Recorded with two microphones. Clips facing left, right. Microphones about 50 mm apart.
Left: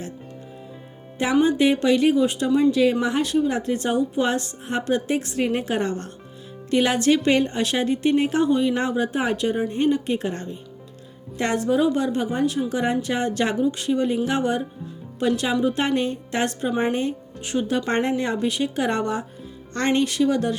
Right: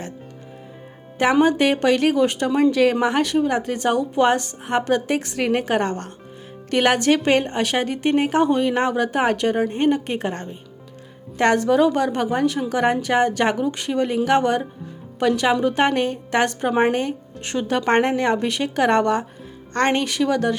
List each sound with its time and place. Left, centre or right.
1.2 s a woman's voice: right
3.0 s a woman's voice: right
4.3 s a woman's voice: right
11.3 s a woman's voice: right
17.4 s a woman's voice: right
17.8 s a woman's voice: right